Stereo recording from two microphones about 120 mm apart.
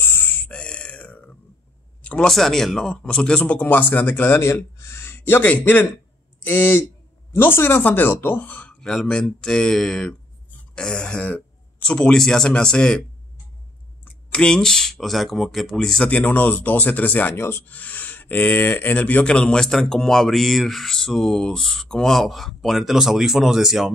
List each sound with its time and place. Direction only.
0.0 s a sound: 20° left (ahead or behind)
2.0 s speech: 10° left (ahead or behind)
14.3 s speech: 5° left (ahead or behind)